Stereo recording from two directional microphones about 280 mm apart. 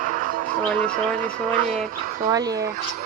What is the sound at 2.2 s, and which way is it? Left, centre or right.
Speech, centre.